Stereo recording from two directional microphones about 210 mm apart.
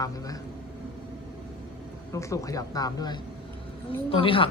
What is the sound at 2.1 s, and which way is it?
Speech, 15° left (ahead or behind).